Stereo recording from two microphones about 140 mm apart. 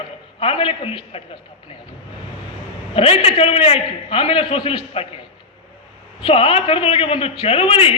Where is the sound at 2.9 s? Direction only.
45° left (ahead or behind).